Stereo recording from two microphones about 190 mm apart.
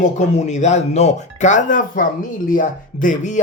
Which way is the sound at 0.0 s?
40° left (ahead or behind).